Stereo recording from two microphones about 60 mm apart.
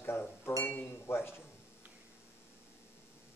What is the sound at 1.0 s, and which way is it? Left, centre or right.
Speech, left.